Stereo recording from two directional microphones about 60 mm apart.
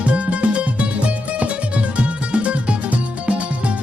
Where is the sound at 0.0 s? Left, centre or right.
Right.